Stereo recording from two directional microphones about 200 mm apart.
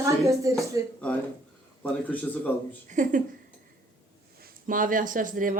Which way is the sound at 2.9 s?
40° right (ahead or behind).